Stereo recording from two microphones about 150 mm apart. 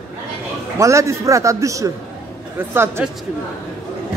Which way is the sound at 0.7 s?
20° right (ahead or behind).